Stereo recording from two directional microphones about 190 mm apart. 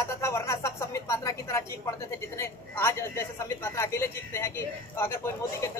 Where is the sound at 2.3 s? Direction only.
15° left (ahead or behind).